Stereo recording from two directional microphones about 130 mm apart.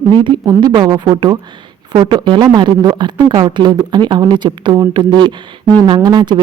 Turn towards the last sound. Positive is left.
turn(degrees=-35)  # may be behind; listen again after turning